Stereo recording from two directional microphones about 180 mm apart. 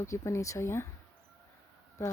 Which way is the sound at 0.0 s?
15° left (ahead or behind).